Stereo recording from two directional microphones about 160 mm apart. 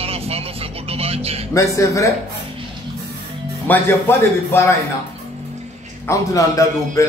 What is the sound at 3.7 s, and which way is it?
Speech, 10° left (ahead or behind).